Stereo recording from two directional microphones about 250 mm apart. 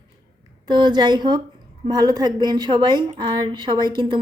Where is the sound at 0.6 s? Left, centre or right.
Centre.